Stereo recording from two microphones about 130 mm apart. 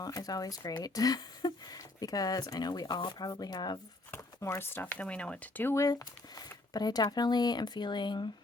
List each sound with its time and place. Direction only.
0.0 s speech: 30° left (ahead or behind)
4.1 s speech: 20° left (ahead or behind)